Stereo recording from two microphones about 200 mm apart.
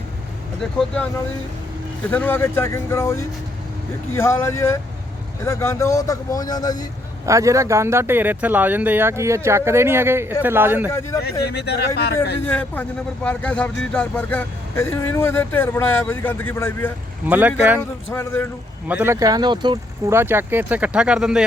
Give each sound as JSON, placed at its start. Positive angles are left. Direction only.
{"t": 0.6, "sound": "speech", "side_deg": 0}
{"t": 2.0, "sound": "speech", "side_deg": 10}
{"t": 7.3, "sound": "speech", "side_deg": -15}
{"t": 12.0, "sound": "speech", "side_deg": 55}
{"t": 12.5, "sound": "speech", "side_deg": 5}
{"t": 17.2, "sound": "speech", "side_deg": -10}
{"t": 17.7, "sound": "speech", "side_deg": 15}
{"t": 18.9, "sound": "speech", "side_deg": -10}